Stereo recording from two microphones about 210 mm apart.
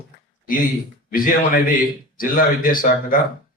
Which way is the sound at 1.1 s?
40° left (ahead or behind).